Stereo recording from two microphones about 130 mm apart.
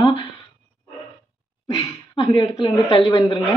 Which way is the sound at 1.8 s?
35° left (ahead or behind).